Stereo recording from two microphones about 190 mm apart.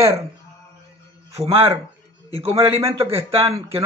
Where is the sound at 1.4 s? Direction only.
30° right (ahead or behind).